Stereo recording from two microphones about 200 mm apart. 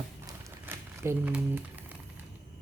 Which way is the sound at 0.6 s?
10° right (ahead or behind).